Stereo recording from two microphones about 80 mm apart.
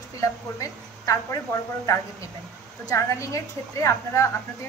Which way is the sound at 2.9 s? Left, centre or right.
Left.